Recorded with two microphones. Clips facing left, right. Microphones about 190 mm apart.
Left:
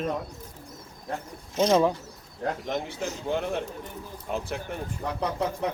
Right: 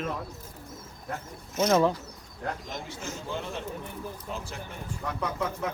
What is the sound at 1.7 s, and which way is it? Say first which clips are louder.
Speech: left 1 dB; 15° left (ahead or behind).